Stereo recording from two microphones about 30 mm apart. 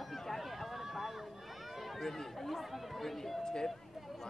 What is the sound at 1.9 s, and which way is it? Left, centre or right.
Speech, centre.